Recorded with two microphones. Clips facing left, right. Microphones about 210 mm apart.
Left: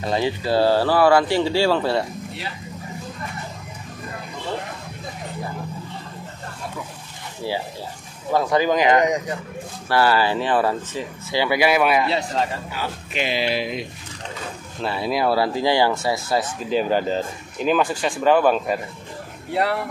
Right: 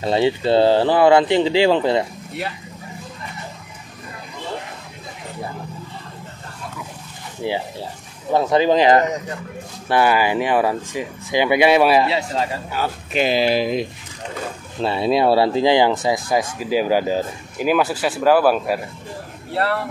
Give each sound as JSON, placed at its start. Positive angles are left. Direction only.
{"t": 0.0, "sound": "speech", "side_deg": -25}
{"t": 7.4, "sound": "speech", "side_deg": -20}
{"t": 9.8, "sound": "speech", "side_deg": -20}
{"t": 12.7, "sound": "speech", "side_deg": -40}
{"t": 14.8, "sound": "speech", "side_deg": -25}
{"t": 19.5, "sound": "speech", "side_deg": 15}